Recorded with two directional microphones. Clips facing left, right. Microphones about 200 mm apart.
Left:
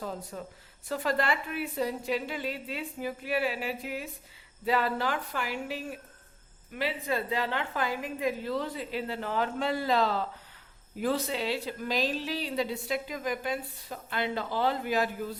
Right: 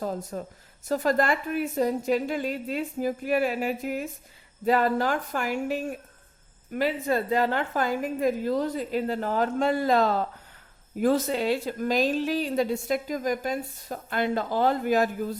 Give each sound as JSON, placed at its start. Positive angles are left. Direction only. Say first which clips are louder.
{"t": 0.0, "sound": "a woman's voice", "louder": "right 6 dB", "side_deg": -45}